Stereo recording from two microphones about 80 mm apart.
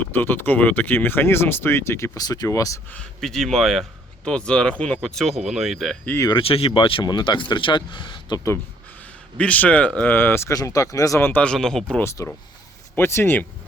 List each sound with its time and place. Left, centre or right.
0.1 s speech: left
2.1 s speech: left
3.2 s speech: centre
4.2 s speech: centre
6.3 s speech: left
9.4 s speech: centre
10.2 s speech: left
10.5 s speech: left
11.2 s speech: left
11.4 s speech: centre
12.0 s speech: left